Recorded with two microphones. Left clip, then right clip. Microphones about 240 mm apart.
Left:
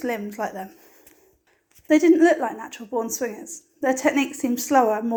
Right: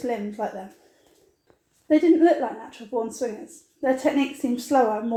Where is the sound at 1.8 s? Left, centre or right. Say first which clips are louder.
Left 1 dB; left.